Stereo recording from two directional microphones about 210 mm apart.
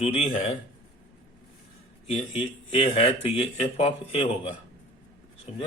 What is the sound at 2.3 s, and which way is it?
A man's voice, 25° left (ahead or behind).